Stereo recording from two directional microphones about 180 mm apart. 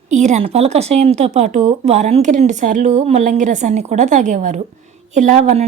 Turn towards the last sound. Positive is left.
turn(degrees=-35)  # may be behind; listen again after turning